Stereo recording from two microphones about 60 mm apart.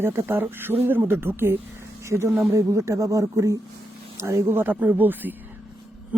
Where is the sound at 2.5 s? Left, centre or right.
Right.